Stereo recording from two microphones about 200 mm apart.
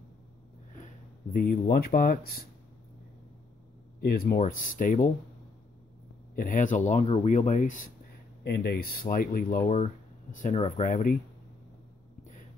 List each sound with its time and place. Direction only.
1.3 s speech: 50° left (ahead or behind)
4.0 s speech: 50° left (ahead or behind)
6.3 s speech: 40° left (ahead or behind)
8.5 s speech: 50° left (ahead or behind)